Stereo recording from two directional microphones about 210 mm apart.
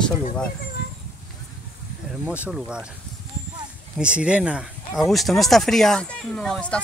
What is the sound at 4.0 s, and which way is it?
Speech, 5° right (ahead or behind).